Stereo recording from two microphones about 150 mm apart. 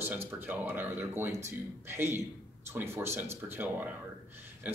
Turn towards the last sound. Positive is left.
turn(degrees=-15)  # may be behind; listen again after turning